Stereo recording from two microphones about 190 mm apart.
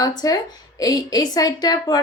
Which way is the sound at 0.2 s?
20° left (ahead or behind).